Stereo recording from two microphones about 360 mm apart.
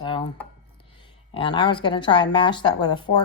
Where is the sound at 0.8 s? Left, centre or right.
Centre.